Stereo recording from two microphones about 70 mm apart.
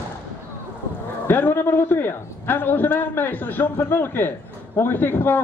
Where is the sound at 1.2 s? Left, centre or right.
Left.